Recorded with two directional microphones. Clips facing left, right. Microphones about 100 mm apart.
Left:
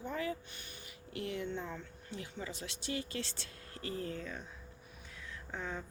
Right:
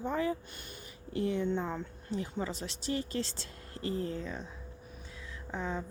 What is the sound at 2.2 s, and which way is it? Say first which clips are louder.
Speech: right 7 dB; 35° right (ahead or behind).